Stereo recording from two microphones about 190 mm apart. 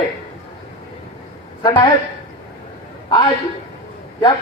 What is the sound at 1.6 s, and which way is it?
Speech, 25° left (ahead or behind).